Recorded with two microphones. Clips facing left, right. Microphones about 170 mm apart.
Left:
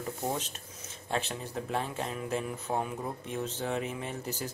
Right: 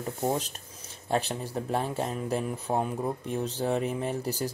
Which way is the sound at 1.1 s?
40° right (ahead or behind).